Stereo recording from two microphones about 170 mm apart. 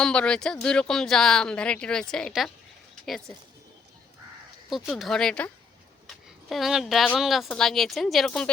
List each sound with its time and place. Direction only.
0.0 s speech: 5° left (ahead or behind)
4.7 s speech: centre (ahead or behind)